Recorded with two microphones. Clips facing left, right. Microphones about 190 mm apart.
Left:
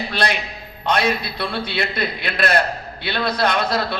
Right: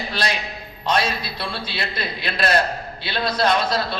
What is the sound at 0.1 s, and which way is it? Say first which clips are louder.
A man's voice: left 2 dB; 60° left (ahead or behind).